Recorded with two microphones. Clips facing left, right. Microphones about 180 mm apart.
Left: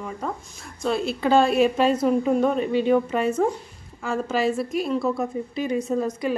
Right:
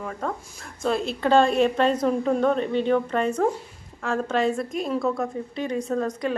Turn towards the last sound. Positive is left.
turn(degrees=5)  # may be behind; listen again after turning